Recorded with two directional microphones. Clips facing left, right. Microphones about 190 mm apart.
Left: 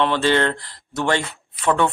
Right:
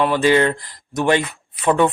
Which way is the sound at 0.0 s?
10° right (ahead or behind).